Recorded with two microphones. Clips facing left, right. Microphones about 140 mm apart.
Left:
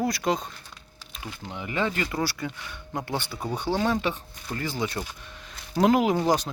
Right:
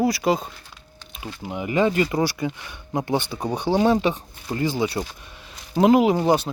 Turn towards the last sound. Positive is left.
turn(degrees=-5)  # may be behind; listen again after turning